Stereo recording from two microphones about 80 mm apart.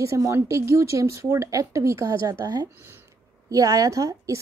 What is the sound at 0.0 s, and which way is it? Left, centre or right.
A woman's voice, right.